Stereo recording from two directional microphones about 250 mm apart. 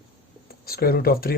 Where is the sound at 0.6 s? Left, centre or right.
Left.